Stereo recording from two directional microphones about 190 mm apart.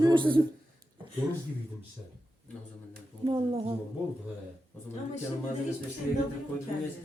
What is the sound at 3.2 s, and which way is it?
Speech, 30° right (ahead or behind).